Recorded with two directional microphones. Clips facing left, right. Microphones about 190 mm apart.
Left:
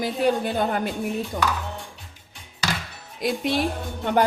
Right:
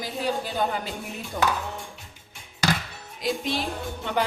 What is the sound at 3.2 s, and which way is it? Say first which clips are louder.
Speech: left 4 dB; 55° left (ahead or behind).